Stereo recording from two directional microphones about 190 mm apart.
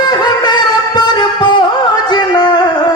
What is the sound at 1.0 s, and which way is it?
Music, 20° left (ahead or behind).